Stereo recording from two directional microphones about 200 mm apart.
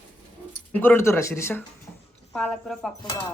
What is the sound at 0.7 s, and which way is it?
Speech, 10° left (ahead or behind).